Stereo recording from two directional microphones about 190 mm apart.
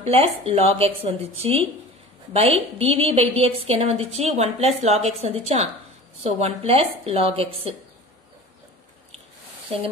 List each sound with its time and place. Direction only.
0.0 s a woman's voice: 30° right (ahead or behind)